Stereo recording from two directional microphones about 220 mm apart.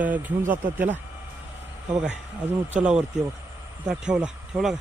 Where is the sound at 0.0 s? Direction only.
5° right (ahead or behind).